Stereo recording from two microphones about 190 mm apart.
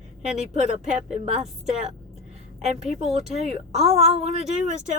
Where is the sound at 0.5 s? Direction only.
35° right (ahead or behind).